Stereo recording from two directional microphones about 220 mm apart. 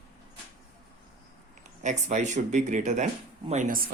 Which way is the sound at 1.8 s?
30° right (ahead or behind).